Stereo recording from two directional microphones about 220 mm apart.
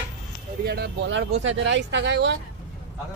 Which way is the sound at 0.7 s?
45° right (ahead or behind).